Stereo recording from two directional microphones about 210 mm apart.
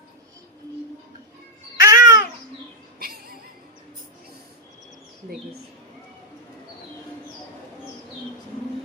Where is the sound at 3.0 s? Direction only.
45° right (ahead or behind).